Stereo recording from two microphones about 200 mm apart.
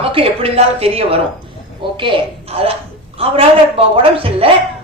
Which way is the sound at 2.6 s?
30° right (ahead or behind).